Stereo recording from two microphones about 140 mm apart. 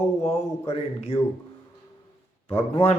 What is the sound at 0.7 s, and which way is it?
Speech, 45° left (ahead or behind).